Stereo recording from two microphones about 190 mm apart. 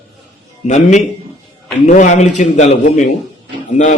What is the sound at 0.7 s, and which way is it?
A man's voice, 40° left (ahead or behind).